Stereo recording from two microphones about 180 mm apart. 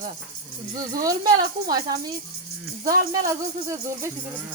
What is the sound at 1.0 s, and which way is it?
Speech, 20° right (ahead or behind).